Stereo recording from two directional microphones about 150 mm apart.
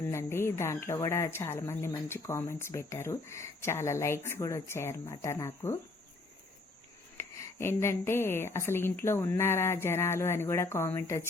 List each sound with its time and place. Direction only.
0.0 s speech: 20° left (ahead or behind)
7.2 s speech: 15° left (ahead or behind)